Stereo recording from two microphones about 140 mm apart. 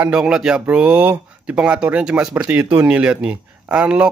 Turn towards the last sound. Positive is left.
turn(degrees=-10)  # may be behind; listen again after turning